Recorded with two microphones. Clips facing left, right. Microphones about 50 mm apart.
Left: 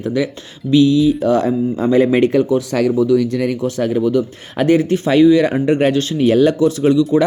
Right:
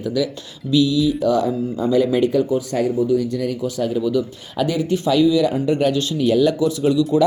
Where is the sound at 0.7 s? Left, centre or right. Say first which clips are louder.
Left 5 dB; left.